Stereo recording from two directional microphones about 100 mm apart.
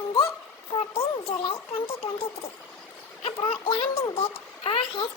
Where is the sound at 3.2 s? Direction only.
70° left (ahead or behind).